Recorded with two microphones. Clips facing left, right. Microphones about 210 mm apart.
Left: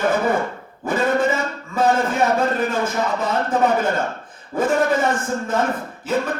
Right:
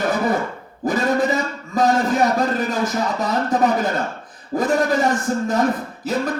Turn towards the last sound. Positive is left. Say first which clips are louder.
# even
turn(degrees=-35)  # may be behind; listen again after turning